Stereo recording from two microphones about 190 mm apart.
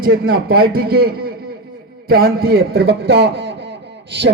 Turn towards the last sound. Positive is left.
turn(degrees=-65)  # may be behind; listen again after turning